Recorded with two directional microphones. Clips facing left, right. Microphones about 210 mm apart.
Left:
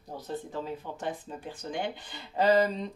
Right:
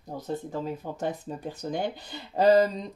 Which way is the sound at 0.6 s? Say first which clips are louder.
Right 4 dB; 40° right (ahead or behind).